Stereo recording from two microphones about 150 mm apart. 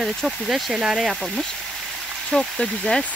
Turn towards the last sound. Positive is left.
turn(degrees=5)  # may be behind; listen again after turning